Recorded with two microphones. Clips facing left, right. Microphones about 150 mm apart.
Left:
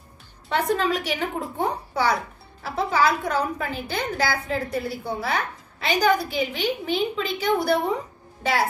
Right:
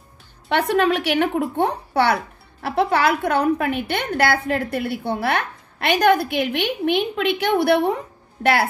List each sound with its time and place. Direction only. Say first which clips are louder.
0.5 s a woman's voice: right 4 dB; 70° right (ahead or behind)